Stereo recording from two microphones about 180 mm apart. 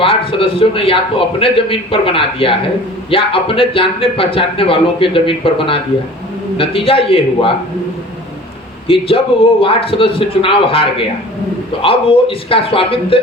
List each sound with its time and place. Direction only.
0.0 s a man's voice: 30° left (ahead or behind)
8.9 s a man's voice: 30° left (ahead or behind)